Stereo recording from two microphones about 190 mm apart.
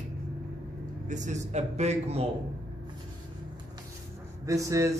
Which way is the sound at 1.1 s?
40° right (ahead or behind).